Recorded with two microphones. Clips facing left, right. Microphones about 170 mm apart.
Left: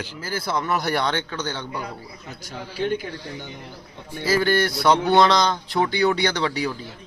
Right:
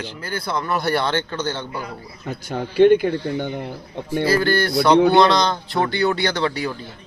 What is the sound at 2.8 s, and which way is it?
Speech, 65° right (ahead or behind).